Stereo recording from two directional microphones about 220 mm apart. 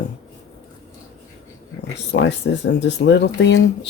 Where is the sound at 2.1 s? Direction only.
60° left (ahead or behind).